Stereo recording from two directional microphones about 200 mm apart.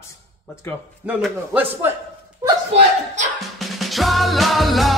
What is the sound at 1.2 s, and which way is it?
Speech, 5° right (ahead or behind).